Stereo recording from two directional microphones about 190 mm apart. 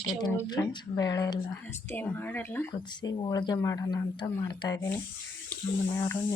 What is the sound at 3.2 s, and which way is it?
Speech, 20° left (ahead or behind).